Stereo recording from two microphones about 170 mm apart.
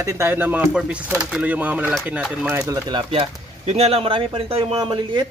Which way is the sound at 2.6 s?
25° right (ahead or behind).